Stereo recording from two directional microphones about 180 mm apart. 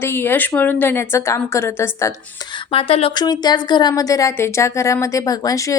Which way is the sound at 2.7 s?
30° left (ahead or behind).